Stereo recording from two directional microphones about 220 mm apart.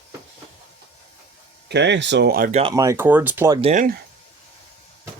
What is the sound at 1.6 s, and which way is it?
Speech, 50° right (ahead or behind).